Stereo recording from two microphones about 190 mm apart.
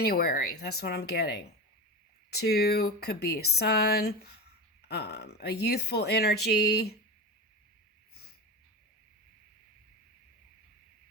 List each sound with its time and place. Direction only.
0.0 s speech: 55° left (ahead or behind)